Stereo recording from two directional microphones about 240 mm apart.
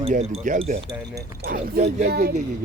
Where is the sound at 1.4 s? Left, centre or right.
Right.